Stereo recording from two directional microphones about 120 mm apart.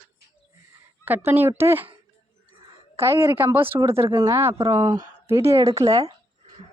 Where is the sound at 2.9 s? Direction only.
25° right (ahead or behind).